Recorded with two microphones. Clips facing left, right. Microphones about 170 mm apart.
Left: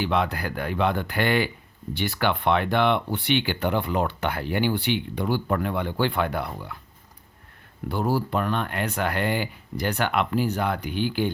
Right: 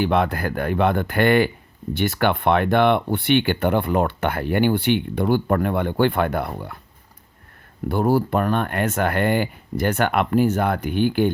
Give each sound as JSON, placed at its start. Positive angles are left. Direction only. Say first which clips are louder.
{"t": 0.0, "sound": "speech", "louder": "right 5 dB", "side_deg": -50}
{"t": 7.9, "sound": "speech", "louder": "right 6 dB", "side_deg": -55}